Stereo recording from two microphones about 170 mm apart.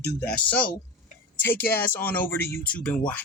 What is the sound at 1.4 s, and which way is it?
Speech, 10° left (ahead or behind).